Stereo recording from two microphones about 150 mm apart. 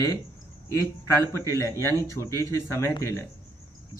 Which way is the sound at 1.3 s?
20° left (ahead or behind).